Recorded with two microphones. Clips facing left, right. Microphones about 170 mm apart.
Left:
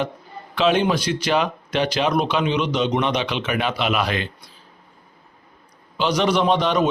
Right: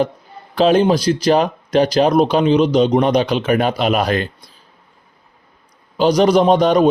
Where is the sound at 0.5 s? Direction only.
40° right (ahead or behind).